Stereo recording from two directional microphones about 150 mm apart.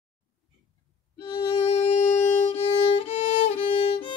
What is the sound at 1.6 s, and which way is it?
Violin, 45° left (ahead or behind).